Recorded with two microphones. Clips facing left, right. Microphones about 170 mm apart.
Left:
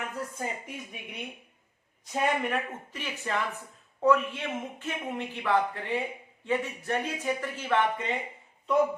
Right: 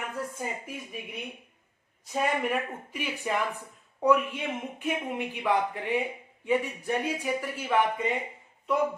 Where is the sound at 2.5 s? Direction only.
10° right (ahead or behind).